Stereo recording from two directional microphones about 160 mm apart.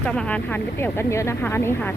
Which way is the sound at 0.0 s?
10° left (ahead or behind).